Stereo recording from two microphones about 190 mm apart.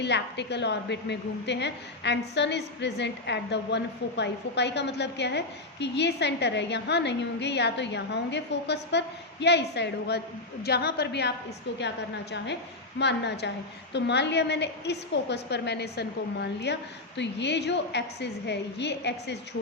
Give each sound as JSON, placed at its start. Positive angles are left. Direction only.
{"t": 0.0, "sound": "a woman's voice", "side_deg": 65}
{"t": 13.0, "sound": "a woman's voice", "side_deg": 65}